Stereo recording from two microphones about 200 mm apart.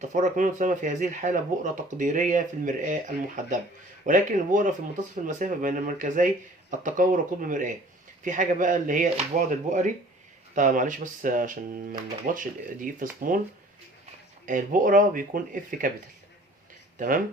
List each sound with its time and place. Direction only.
0.0 s speech: 40° right (ahead or behind)
14.4 s speech: 40° right (ahead or behind)
17.0 s speech: 45° right (ahead or behind)